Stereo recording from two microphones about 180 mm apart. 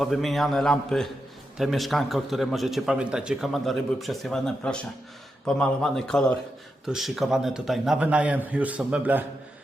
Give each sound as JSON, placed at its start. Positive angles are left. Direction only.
{"t": 0.0, "sound": "a man's voice", "side_deg": 0}